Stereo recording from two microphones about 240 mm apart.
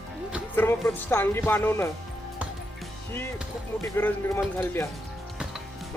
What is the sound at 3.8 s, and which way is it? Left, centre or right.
Speech, centre.